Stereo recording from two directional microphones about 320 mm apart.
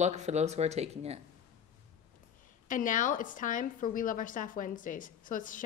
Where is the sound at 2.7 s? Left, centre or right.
Left.